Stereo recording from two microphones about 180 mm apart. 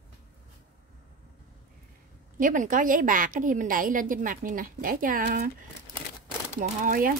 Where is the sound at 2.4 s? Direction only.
50° right (ahead or behind).